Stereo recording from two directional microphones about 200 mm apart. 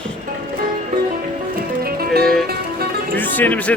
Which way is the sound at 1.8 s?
50° right (ahead or behind).